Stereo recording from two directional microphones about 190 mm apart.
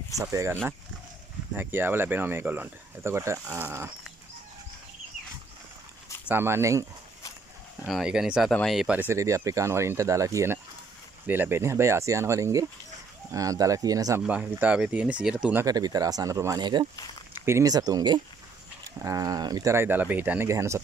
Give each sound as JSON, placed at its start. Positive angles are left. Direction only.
{"t": 0.2, "sound": "speech", "side_deg": -15}
{"t": 6.2, "sound": "speech", "side_deg": -10}
{"t": 7.9, "sound": "speech", "side_deg": -5}
{"t": 14.2, "sound": "speech", "side_deg": -10}
{"t": 15.6, "sound": "speech", "side_deg": -20}